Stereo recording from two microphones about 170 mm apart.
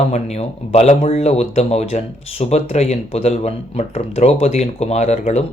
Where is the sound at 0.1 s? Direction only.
40° left (ahead or behind).